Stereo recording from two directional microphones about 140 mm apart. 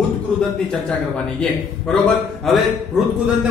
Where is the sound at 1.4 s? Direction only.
5° left (ahead or behind).